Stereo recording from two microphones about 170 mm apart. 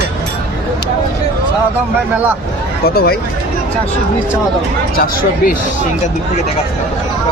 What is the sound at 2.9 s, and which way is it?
Speech, 65° left (ahead or behind).